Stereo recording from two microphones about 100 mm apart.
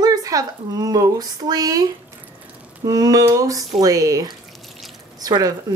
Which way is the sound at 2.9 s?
35° right (ahead or behind).